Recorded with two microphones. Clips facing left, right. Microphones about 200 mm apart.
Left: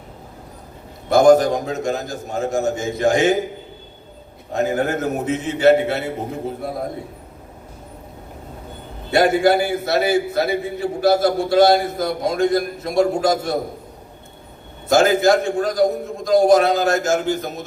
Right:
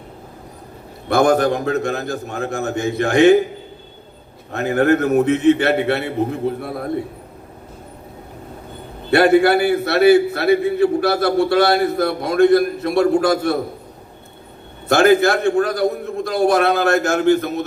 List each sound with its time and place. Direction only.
1.0 s a man's voice: 60° right (ahead or behind)
4.5 s a man's voice: 60° right (ahead or behind)
9.1 s a man's voice: 60° right (ahead or behind)
14.8 s a man's voice: 60° right (ahead or behind)